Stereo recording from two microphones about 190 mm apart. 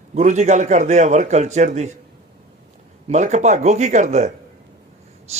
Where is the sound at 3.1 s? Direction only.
35° right (ahead or behind).